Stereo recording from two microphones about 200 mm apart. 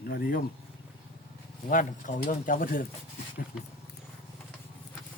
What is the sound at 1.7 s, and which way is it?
Speech, 40° left (ahead or behind).